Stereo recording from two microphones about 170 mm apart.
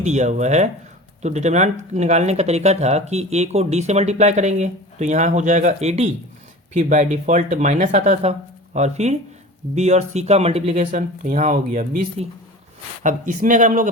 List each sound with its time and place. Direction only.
0.0 s speech: 45° right (ahead or behind)